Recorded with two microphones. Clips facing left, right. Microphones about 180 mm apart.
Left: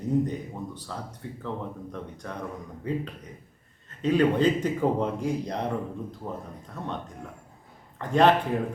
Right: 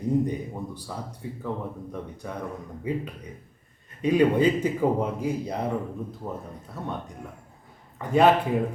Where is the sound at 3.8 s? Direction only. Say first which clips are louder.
Right 2 dB; 10° right (ahead or behind).